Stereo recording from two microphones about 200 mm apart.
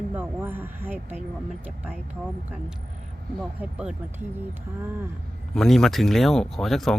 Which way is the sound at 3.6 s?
5° right (ahead or behind).